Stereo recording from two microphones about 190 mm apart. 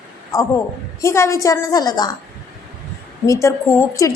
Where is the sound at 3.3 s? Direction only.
15° left (ahead or behind).